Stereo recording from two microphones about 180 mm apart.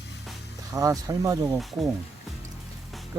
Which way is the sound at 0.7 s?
20° right (ahead or behind).